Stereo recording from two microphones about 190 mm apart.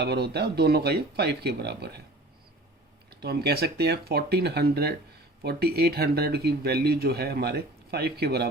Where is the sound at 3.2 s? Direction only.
55° right (ahead or behind).